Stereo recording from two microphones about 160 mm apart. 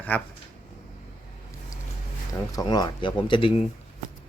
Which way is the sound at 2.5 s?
25° left (ahead or behind).